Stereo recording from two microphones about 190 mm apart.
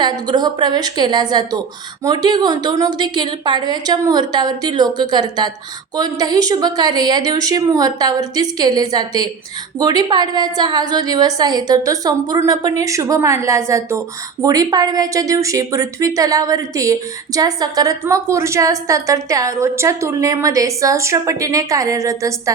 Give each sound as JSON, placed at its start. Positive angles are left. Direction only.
{"t": 0.0, "sound": "a woman's voice", "side_deg": -20}